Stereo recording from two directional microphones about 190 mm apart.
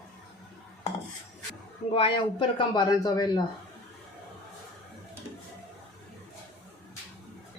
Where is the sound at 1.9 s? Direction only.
25° left (ahead or behind).